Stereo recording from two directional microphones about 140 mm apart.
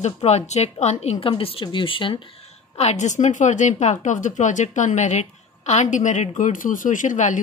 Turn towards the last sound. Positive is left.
turn(degrees=65)  # may be behind; listen again after turning